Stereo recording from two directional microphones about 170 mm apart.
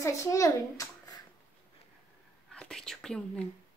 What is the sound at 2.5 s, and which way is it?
Speech, 5° left (ahead or behind).